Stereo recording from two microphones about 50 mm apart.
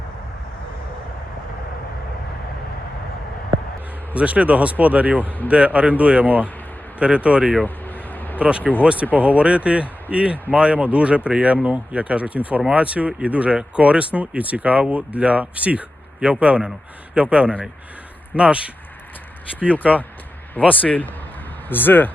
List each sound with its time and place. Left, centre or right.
4.1 s speech: right
5.2 s a man's voice: left
5.5 s speech: right
7.9 s a sound: left
8.4 s speech: right
20.6 s a man's voice: left
21.7 s speech: left